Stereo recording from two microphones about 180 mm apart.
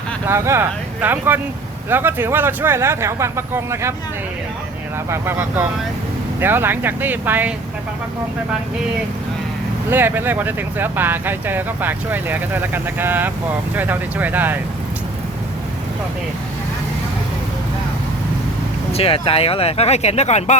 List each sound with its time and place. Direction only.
0.3 s speech: 15° right (ahead or behind)
5.0 s speech: 15° right (ahead or behind)
9.9 s speech: 10° right (ahead or behind)
18.9 s speech: 35° left (ahead or behind)